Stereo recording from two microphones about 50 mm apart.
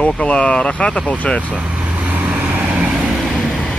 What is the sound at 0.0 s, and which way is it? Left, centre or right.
Speech, left.